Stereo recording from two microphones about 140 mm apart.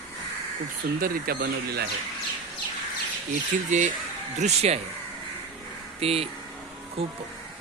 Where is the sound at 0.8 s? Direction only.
90° right.